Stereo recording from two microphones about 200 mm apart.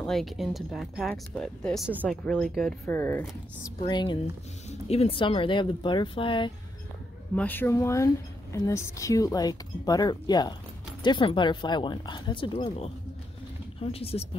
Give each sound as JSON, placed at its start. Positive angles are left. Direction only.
{"t": 0.0, "sound": "speech", "side_deg": 0}
{"t": 1.9, "sound": "speech", "side_deg": -10}
{"t": 2.2, "sound": "speech", "side_deg": 5}
{"t": 2.9, "sound": "speech", "side_deg": 10}
{"t": 3.8, "sound": "speech", "side_deg": 25}
{"t": 7.3, "sound": "speech", "side_deg": 10}